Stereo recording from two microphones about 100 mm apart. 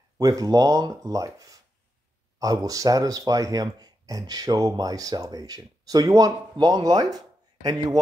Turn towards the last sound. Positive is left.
turn(degrees=-40)  # may be behind; listen again after turning